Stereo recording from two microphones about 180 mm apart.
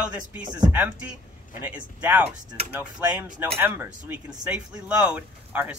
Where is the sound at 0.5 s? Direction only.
25° right (ahead or behind).